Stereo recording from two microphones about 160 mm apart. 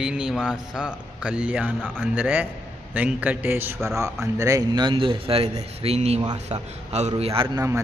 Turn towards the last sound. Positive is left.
turn(degrees=-20)  # may be behind; listen again after turning